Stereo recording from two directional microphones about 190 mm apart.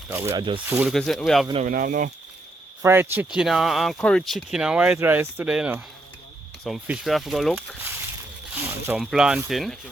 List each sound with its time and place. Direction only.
0.1 s speech: 15° right (ahead or behind)
0.9 s speech: centre (ahead or behind)
1.6 s speech: 45° right (ahead or behind)
2.8 s speech: 10° right (ahead or behind)